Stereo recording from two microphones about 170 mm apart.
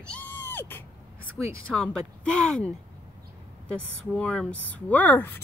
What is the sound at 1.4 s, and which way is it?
Speech, centre (ahead or behind).